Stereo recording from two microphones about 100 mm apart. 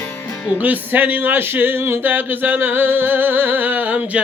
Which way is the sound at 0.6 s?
15° right (ahead or behind).